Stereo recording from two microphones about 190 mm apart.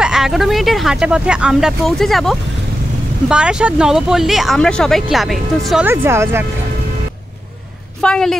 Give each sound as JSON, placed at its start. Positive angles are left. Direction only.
{"t": 0.0, "sound": "speech", "side_deg": -5}
{"t": 5.9, "sound": "speech", "side_deg": -10}
{"t": 8.0, "sound": "speech", "side_deg": 5}